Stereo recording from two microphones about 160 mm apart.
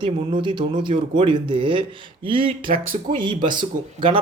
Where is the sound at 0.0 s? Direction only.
30° right (ahead or behind).